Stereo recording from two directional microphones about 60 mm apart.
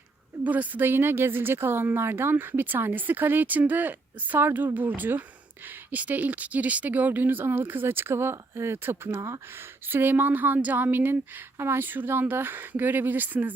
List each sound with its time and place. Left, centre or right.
0.4 s speech: right